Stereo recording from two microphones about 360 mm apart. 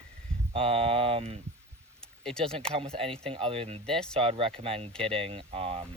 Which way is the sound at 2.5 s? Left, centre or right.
Centre.